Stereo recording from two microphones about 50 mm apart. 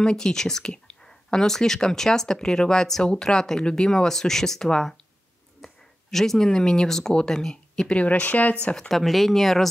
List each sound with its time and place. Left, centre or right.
0.0 s speech: centre
8.0 s speech: left
8.7 s speech: centre